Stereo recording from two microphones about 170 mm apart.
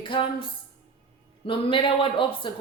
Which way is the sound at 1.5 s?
30° left (ahead or behind).